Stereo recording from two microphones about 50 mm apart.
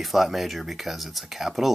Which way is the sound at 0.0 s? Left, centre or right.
Centre.